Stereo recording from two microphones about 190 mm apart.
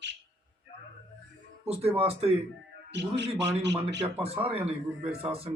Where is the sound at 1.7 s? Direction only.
30° right (ahead or behind).